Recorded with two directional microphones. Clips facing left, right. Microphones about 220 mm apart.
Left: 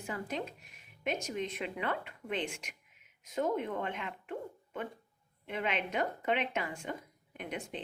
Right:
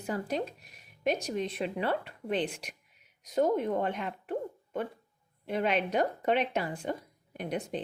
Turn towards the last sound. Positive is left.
turn(degrees=-40)  # may be behind; listen again after turning